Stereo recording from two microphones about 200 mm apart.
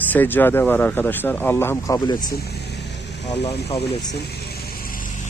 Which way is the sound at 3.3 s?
25° left (ahead or behind).